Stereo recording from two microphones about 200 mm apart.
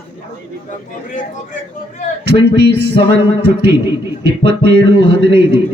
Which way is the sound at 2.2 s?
55° right (ahead or behind).